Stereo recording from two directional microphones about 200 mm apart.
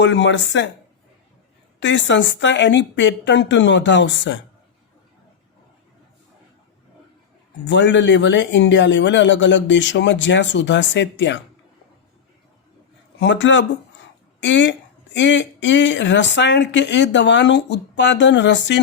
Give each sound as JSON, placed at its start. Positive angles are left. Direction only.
{"t": 0.0, "sound": "speech", "side_deg": 65}
{"t": 1.8, "sound": "speech", "side_deg": 65}
{"t": 7.7, "sound": "speech", "side_deg": 65}
{"t": 13.1, "sound": "speech", "side_deg": 65}